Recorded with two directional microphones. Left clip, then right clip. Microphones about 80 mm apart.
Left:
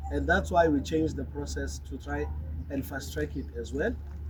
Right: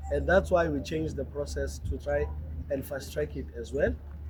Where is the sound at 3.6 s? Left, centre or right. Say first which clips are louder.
Right 3 dB; right.